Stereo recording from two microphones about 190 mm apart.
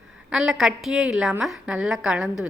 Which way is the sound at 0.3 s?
Centre (ahead or behind).